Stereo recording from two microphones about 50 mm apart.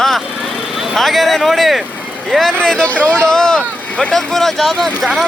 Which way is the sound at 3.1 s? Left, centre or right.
Centre.